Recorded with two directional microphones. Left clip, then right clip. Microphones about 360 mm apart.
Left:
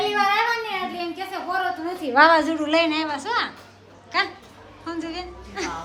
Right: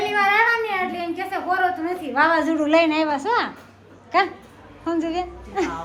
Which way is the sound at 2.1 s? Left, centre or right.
Left.